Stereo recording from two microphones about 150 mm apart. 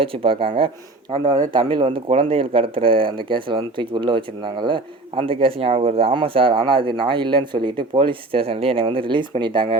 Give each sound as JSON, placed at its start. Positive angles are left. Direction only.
{"t": 0.0, "sound": "speech", "side_deg": -35}